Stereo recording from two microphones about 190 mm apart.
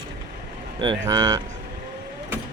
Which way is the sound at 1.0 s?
20° right (ahead or behind).